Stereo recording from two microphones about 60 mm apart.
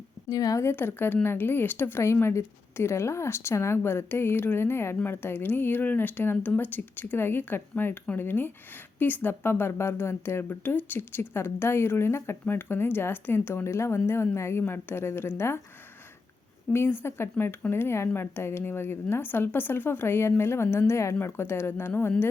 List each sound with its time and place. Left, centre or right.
0.3 s a woman's voice: left
0.6 s speech: left
16.7 s speech: left